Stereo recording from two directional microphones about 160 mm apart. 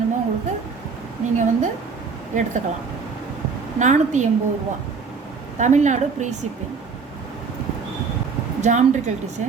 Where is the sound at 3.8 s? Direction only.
50° right (ahead or behind).